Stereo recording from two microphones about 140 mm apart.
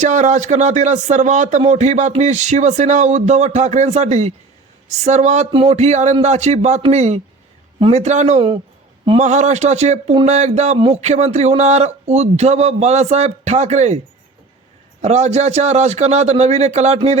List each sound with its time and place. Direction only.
0.0 s speech: 60° right (ahead or behind)
5.5 s speech: 45° right (ahead or behind)
15.0 s speech: 50° right (ahead or behind)